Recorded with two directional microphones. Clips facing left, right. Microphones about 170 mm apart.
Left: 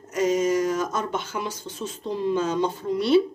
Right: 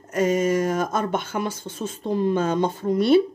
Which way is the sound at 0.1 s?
55° right (ahead or behind).